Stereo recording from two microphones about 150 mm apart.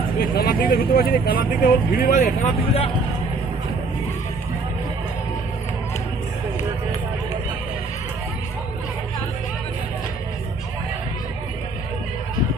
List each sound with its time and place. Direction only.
0.2 s speech: 80° left
2.0 s speech: 55° left (ahead or behind)